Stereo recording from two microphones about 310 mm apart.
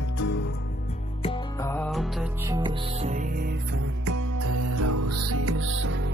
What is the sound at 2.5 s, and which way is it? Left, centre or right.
Music, centre.